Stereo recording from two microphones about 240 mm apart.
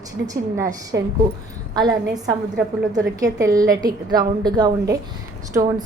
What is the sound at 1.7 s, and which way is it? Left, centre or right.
A woman's voice, centre.